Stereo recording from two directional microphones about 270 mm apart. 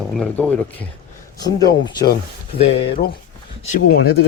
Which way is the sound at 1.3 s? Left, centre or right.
Centre.